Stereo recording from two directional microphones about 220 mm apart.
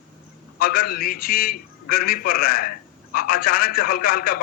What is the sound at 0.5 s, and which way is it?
A man's voice, 40° left (ahead or behind).